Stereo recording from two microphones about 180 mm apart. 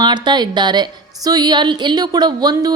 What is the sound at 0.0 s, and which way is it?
A woman's voice, 25° right (ahead or behind).